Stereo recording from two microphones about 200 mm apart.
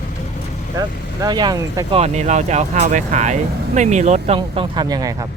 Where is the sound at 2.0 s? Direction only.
35° right (ahead or behind).